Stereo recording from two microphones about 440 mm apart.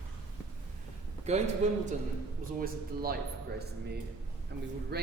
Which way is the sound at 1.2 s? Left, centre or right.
Centre.